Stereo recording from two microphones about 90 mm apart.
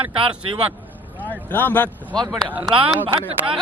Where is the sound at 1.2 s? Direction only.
20° left (ahead or behind).